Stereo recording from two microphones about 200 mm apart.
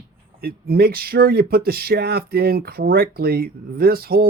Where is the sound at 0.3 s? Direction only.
50° right (ahead or behind).